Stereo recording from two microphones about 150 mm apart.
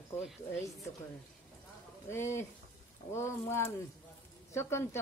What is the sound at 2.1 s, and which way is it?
Speech, 15° left (ahead or behind).